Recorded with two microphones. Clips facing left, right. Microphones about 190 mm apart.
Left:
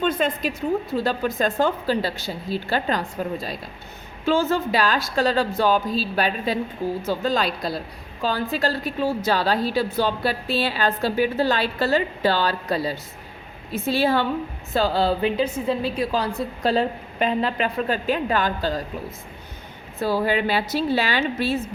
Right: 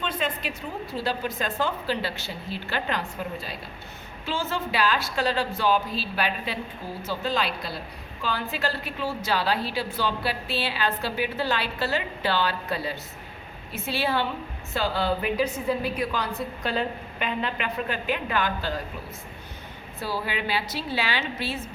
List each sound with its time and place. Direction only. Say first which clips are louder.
0.0 s a woman's voice: left 7 dB; 45° left (ahead or behind)
4.3 s a woman's voice: left 9 dB; 45° left (ahead or behind)
20.0 s a woman's voice: left 9 dB; 45° left (ahead or behind)